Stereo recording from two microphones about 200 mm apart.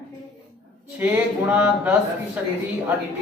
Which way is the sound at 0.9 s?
10° right (ahead or behind).